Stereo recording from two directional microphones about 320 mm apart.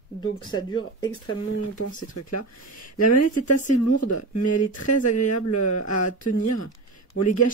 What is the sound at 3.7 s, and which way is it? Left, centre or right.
Speech, left.